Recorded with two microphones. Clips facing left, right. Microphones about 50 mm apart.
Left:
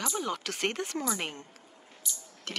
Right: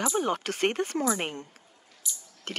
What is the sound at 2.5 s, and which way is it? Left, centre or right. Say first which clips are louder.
Speech: right 2 dB; right.